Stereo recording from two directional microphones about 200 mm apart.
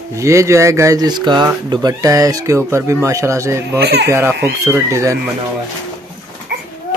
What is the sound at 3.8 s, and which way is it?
Speech, 55° right (ahead or behind).